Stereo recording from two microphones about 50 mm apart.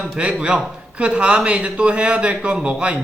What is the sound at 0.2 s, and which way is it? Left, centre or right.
Speech, right.